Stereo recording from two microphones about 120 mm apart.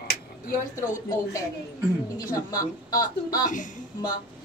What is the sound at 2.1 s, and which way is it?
A woman's voice, 30° left (ahead or behind).